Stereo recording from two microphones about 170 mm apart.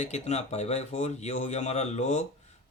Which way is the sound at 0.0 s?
40° left (ahead or behind).